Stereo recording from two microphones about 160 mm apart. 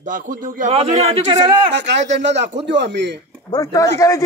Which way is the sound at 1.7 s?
90° right.